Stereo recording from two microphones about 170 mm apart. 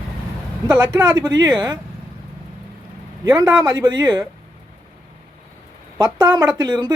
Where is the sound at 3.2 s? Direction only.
20° right (ahead or behind).